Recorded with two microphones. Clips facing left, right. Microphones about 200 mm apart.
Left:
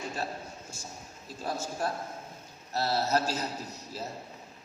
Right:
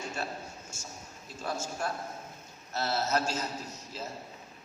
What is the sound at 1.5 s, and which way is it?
A man's voice, 35° left (ahead or behind).